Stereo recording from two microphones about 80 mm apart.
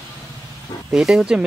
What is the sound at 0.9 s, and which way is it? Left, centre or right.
Speech, centre.